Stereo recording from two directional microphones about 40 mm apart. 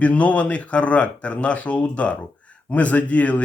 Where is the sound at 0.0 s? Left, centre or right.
Left.